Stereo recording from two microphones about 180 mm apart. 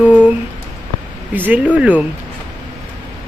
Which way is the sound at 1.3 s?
10° right (ahead or behind).